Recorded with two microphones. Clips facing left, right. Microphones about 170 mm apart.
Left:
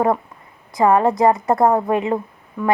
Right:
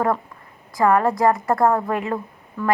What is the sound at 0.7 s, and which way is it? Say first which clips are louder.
A woman's voice: left 2 dB; 20° left (ahead or behind).